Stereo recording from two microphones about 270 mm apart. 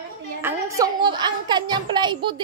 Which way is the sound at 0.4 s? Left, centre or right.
Centre.